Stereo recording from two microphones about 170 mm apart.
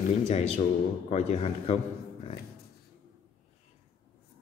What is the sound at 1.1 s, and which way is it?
Speech, 40° left (ahead or behind).